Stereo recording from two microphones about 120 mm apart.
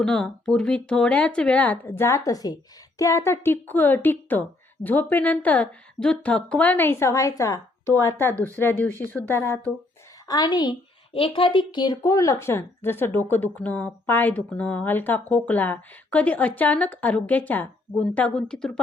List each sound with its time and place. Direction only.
0.0 s speech: 5° left (ahead or behind)
10.2 s a woman's voice: 35° left (ahead or behind)
11.1 s speech: 45° left (ahead or behind); by 18.8 s 5° left (ahead or behind)